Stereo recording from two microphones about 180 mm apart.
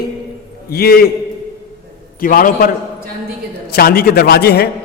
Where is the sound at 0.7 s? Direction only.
60° left (ahead or behind).